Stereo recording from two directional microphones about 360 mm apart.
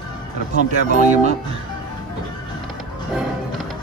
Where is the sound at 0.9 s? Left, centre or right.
Centre.